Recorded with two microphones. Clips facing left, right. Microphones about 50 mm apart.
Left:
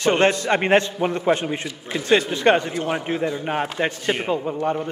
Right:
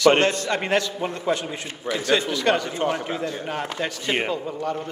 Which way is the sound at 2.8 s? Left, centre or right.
Left.